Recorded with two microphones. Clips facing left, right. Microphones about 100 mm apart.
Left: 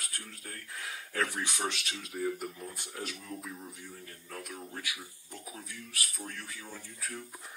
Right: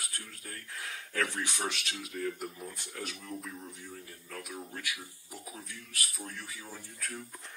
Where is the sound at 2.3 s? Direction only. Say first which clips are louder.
Left 1 dB; centre (ahead or behind).